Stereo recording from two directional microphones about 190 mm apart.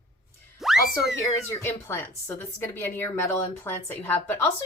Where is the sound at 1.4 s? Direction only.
10° left (ahead or behind).